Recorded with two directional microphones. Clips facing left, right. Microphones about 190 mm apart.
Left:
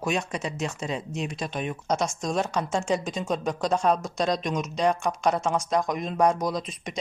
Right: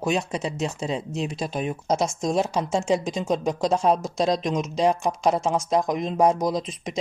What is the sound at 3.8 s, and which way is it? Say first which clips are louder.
Speech: right 2 dB; 25° right (ahead or behind).